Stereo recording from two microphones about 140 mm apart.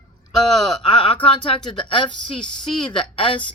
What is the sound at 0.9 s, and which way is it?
Speech, 40° left (ahead or behind).